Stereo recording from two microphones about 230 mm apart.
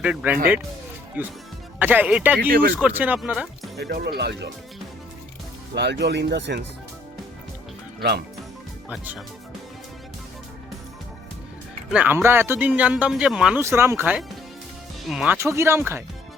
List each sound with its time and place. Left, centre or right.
0.0 s speech: centre
2.5 s speech: right
2.7 s speech: centre
3.8 s speech: right
5.7 s speech: right
8.9 s speech: centre
11.9 s speech: centre